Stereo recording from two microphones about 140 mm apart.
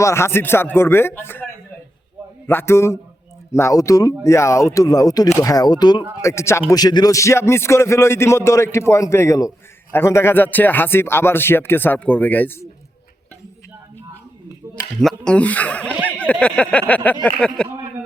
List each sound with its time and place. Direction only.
0.0 s speech: 20° left (ahead or behind)
2.5 s speech: 15° left (ahead or behind)
15.0 s speech: 5° left (ahead or behind)
16.0 s a sound: 10° left (ahead or behind)
17.2 s speech: 5° left (ahead or behind)